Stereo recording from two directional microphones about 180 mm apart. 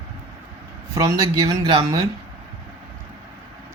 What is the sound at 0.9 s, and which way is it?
Speech, 20° right (ahead or behind).